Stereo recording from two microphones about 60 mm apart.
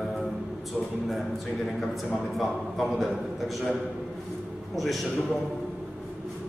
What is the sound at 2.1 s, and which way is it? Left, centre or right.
A man's voice, centre.